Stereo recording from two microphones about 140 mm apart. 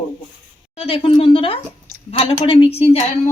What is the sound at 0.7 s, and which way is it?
A woman's voice, 45° left (ahead or behind).